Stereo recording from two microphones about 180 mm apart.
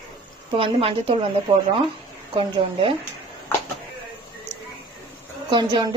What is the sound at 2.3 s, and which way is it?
Speech, 30° right (ahead or behind).